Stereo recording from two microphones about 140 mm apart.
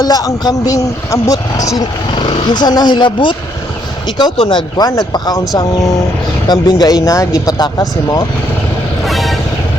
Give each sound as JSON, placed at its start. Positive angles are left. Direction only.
{"t": 0.0, "sound": "speech", "side_deg": 25}
{"t": 6.5, "sound": "speech", "side_deg": 30}
{"t": 9.0, "sound": "music", "side_deg": 0}